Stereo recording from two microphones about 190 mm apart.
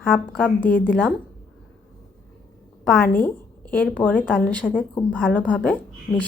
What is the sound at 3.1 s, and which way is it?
A woman's voice, 10° left (ahead or behind).